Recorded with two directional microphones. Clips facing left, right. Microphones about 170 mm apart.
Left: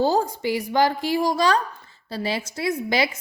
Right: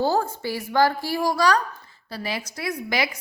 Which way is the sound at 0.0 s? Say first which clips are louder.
Left 2 dB; 15° left (ahead or behind).